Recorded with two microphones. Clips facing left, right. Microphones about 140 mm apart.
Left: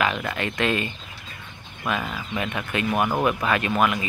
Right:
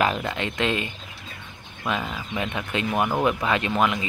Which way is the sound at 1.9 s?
20° right (ahead or behind).